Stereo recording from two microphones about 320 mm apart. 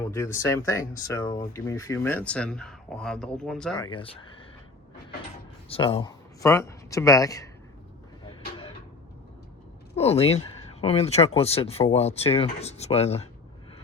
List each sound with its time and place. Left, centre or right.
0.0 s speech: centre
3.8 s speech: centre
5.6 s speech: centre
8.3 s a sound: centre
9.9 s speech: centre